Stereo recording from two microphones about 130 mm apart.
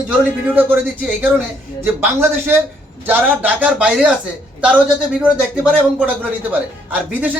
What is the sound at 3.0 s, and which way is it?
A man's voice, 15° right (ahead or behind).